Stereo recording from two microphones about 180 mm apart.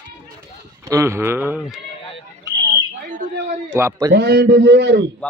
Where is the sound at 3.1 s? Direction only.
45° right (ahead or behind).